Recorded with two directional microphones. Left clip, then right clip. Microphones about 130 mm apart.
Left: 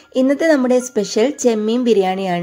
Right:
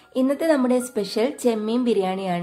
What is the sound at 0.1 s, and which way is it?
A woman's voice, 35° left (ahead or behind).